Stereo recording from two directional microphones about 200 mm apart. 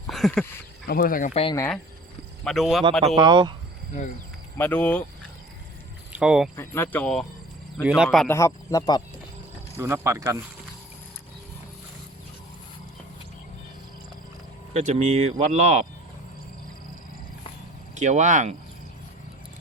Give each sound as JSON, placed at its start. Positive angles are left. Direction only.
{"t": 0.1, "sound": "a sound", "side_deg": 0}
{"t": 0.9, "sound": "speech", "side_deg": 45}
{"t": 1.3, "sound": "speech", "side_deg": 30}
{"t": 1.5, "sound": "speech", "side_deg": 10}
{"t": 3.2, "sound": "speech", "side_deg": -20}
{"t": 4.5, "sound": "speech", "side_deg": 10}
{"t": 6.1, "sound": "speech", "side_deg": -5}
{"t": 6.6, "sound": "speech", "side_deg": 10}
{"t": 8.3, "sound": "speech", "side_deg": 15}
{"t": 9.7, "sound": "speech", "side_deg": -15}
{"t": 14.7, "sound": "speech", "side_deg": -35}
{"t": 17.9, "sound": "speech", "side_deg": -35}